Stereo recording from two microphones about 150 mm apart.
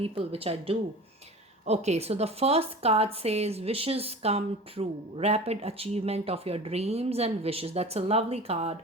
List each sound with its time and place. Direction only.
0.0 s a woman's voice: 40° right (ahead or behind)